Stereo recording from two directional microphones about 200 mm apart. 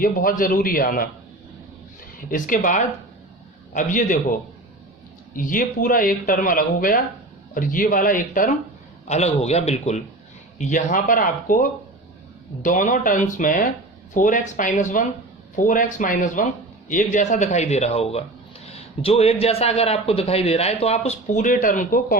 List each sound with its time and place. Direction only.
0.0 s speech: 45° left (ahead or behind)
2.3 s speech: 40° left (ahead or behind)
5.4 s speech: 40° left (ahead or behind)